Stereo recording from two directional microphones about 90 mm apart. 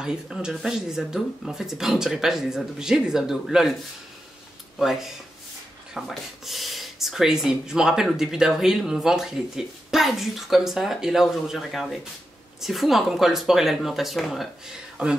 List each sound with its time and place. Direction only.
0.0 s speech: 10° right (ahead or behind)
4.7 s speech: 5° right (ahead or behind)
15.0 s speech: 10° right (ahead or behind)